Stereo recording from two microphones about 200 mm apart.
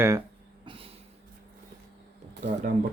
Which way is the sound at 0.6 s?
25° right (ahead or behind).